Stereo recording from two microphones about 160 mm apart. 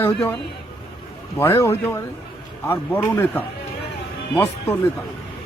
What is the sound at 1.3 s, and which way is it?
Speech, 15° left (ahead or behind).